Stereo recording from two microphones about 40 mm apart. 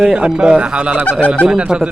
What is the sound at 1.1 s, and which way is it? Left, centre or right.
Speech, left.